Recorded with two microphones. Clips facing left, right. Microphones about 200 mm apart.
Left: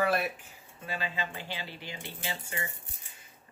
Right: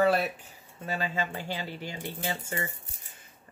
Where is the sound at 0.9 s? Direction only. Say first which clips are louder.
Right 4 dB; 45° right (ahead or behind).